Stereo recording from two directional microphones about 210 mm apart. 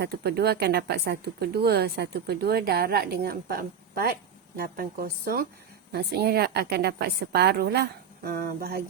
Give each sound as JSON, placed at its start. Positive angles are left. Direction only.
{"t": 0.0, "sound": "speech", "side_deg": -50}